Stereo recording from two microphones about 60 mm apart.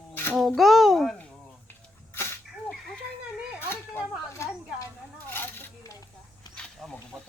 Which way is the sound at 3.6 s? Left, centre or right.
Left.